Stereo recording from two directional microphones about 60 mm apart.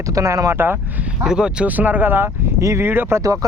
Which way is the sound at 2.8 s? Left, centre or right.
Right.